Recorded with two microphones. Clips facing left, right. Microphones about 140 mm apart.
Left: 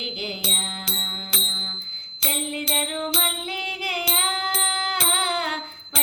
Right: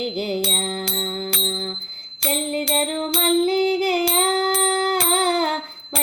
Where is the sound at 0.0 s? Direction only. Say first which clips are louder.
Right 9 dB; 45° right (ahead or behind).